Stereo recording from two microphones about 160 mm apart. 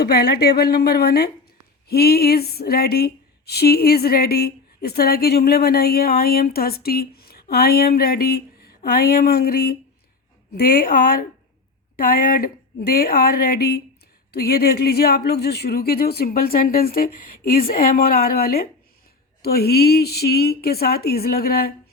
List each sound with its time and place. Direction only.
0.0 s speech: 75° left (ahead or behind)